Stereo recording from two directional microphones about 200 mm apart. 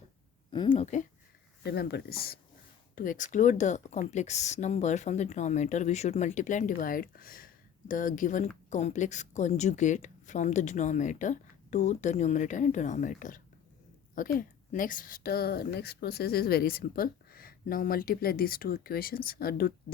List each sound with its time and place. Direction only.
0.5 s a woman's voice: 25° left (ahead or behind)
1.6 s a woman's voice: 55° left (ahead or behind)